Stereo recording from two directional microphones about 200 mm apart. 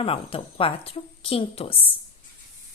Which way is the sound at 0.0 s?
30° left (ahead or behind).